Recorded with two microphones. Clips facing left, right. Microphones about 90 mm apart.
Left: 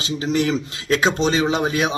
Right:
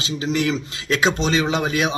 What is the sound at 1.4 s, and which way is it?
Speech, 25° left (ahead or behind).